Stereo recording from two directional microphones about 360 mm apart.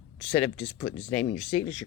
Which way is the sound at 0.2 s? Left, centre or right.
Centre.